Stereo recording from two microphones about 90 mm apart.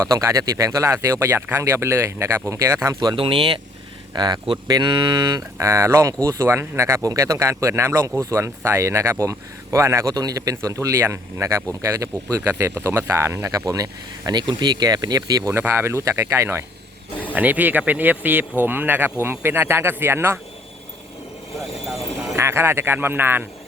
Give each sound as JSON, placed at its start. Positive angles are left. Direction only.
{"t": 0.0, "sound": "a man's voice", "side_deg": -30}
{"t": 3.2, "sound": "speech", "side_deg": -80}
{"t": 4.1, "sound": "mantra", "side_deg": -50}
{"t": 5.5, "sound": "a man's voice", "side_deg": -30}
{"t": 15.5, "sound": "a man's voice", "side_deg": -30}
{"t": 17.3, "sound": "speech", "side_deg": -20}
{"t": 21.8, "sound": "vehicle", "side_deg": 0}
{"t": 22.4, "sound": "speech", "side_deg": -30}